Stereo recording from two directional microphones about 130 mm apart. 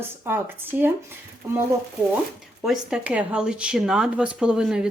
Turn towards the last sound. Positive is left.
turn(degrees=-5)  # may be behind; listen again after turning